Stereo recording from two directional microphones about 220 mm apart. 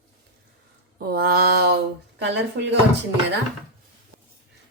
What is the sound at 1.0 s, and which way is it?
Mantra, 45° right (ahead or behind).